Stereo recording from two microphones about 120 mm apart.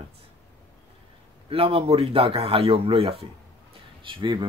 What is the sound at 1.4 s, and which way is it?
Speech, 50° right (ahead or behind).